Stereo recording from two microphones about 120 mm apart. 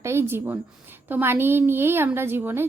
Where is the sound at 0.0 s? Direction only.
20° right (ahead or behind).